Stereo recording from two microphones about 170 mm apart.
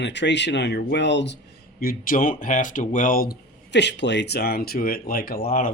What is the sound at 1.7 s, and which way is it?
Speech, 55° left (ahead or behind).